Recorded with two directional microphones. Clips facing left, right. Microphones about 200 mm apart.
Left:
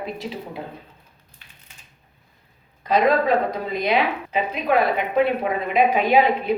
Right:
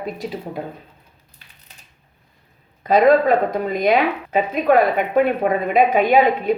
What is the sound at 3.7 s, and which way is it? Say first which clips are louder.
A woman's voice: right 4 dB; 45° right (ahead or behind).